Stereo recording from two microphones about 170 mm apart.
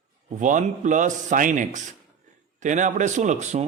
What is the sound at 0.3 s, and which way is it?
Speech, 50° right (ahead or behind).